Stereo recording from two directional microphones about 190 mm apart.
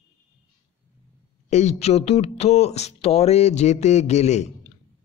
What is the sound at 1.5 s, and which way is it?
Speech, 35° left (ahead or behind).